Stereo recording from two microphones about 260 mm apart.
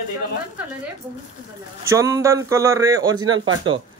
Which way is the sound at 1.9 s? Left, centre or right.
Centre.